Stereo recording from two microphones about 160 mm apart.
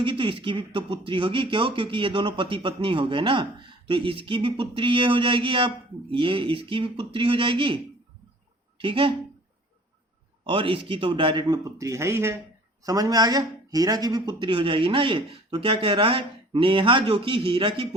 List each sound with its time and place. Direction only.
0.0 s speech: 30° right (ahead or behind)
8.8 s speech: 35° right (ahead or behind)
10.4 s a man's voice: 35° right (ahead or behind)